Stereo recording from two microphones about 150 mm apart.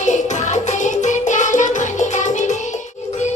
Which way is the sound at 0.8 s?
55° left (ahead or behind).